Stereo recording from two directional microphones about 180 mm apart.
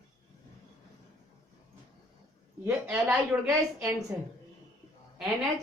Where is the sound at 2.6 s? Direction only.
5° right (ahead or behind).